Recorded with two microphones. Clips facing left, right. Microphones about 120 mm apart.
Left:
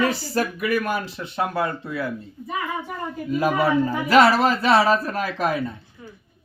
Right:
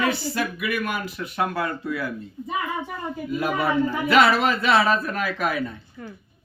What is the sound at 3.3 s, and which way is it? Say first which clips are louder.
Speech: left 3 dB; 40° left (ahead or behind).